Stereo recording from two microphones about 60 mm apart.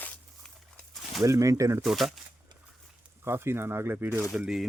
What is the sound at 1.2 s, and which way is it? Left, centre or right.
Speech, right.